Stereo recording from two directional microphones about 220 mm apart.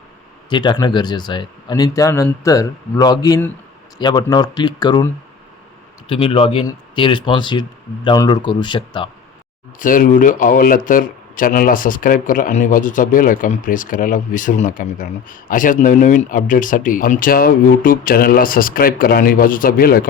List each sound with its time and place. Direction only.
0.5 s speech: 20° left (ahead or behind)
6.1 s speech: 25° left (ahead or behind)
9.7 s speech: 35° left (ahead or behind)